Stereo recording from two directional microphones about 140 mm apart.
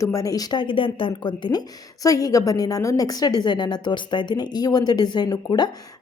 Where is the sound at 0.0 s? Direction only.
25° left (ahead or behind).